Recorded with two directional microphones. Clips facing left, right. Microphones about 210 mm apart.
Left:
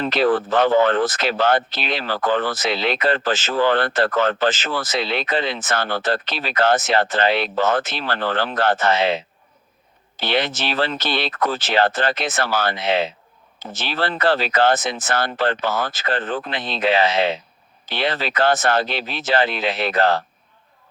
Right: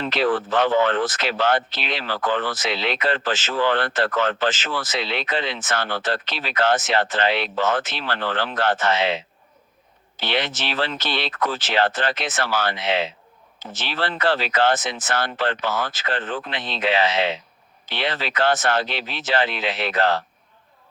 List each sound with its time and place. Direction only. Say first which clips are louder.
0.0 s speech: left 3 dB; 40° left (ahead or behind)
10.2 s speech: left 3 dB; 35° left (ahead or behind)